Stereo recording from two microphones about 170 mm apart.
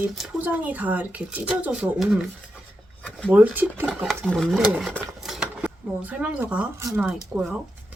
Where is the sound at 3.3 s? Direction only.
10° right (ahead or behind).